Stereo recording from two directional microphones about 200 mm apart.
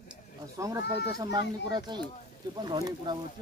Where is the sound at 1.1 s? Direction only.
15° right (ahead or behind).